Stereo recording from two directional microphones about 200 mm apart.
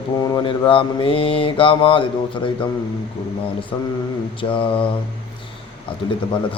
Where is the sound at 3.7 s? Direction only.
25° left (ahead or behind).